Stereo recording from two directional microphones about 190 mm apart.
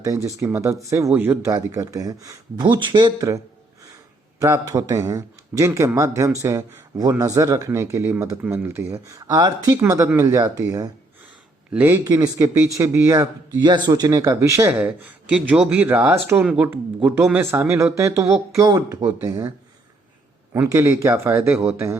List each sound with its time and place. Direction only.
0.0 s speech: 15° right (ahead or behind)
11.7 s speech: 10° right (ahead or behind)